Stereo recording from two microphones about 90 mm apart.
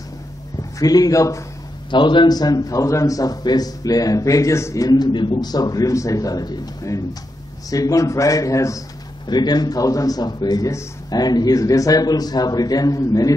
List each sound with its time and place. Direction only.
0.7 s a man's voice: 45° left (ahead or behind)
1.9 s a man's voice: 60° left (ahead or behind); by 4.8 s 35° left (ahead or behind)
4.8 s a man's voice: 50° left (ahead or behind)
9.3 s a man's voice: 50° left (ahead or behind)